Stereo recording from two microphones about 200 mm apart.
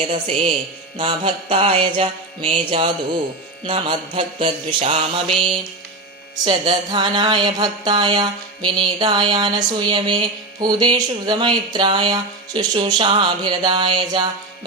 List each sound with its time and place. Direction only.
0.1 s speech: 30° right (ahead or behind)
6.4 s speech: 25° right (ahead or behind)